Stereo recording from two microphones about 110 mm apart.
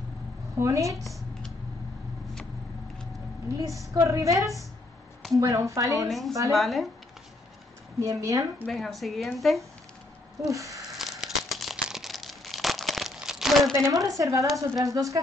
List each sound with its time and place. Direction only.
0.6 s a woman's voice: 30° right (ahead or behind)
3.5 s a woman's voice: 30° right (ahead or behind)
6.0 s a woman's voice: centre (ahead or behind)
8.0 s a woman's voice: 30° right (ahead or behind)
8.6 s a woman's voice: centre (ahead or behind)
10.4 s a sound: 30° right (ahead or behind)
11.0 s crumpling: 5° right (ahead or behind)
14.0 s a woman's voice: 30° right (ahead or behind)